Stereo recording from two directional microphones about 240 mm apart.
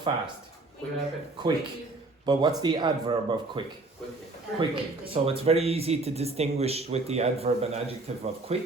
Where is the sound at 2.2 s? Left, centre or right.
Centre.